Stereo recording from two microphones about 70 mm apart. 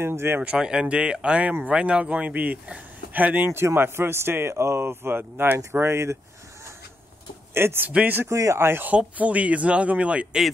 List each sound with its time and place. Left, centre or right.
0.0 s speech: right
0.4 s speech: centre
3.5 s speech: right
7.5 s speech: right
7.9 s speech: centre
8.4 s speech: right
8.8 s speech: right